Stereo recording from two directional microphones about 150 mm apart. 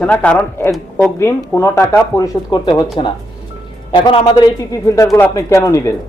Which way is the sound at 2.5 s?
30° left (ahead or behind).